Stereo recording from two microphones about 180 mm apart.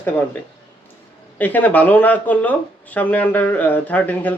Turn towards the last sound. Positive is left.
turn(degrees=10)  # may be behind; listen again after turning